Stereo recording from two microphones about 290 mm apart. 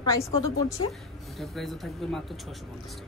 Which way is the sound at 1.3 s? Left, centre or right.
Centre.